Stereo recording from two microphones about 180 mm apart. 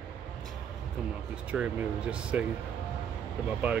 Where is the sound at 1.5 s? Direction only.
5° right (ahead or behind).